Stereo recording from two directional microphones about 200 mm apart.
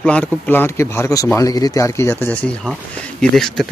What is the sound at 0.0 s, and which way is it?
Speech, 5° left (ahead or behind).